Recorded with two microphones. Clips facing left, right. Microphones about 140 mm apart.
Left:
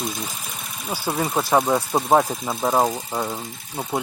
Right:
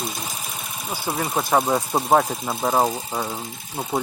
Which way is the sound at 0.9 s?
15° right (ahead or behind).